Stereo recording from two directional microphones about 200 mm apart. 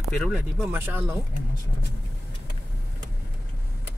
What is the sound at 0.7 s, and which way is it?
Speech, 10° right (ahead or behind).